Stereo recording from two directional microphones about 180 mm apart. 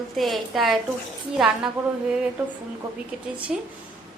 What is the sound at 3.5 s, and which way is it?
Speech, centre (ahead or behind).